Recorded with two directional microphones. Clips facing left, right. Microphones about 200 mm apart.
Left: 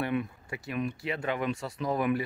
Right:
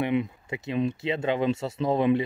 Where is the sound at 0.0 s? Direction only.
20° right (ahead or behind).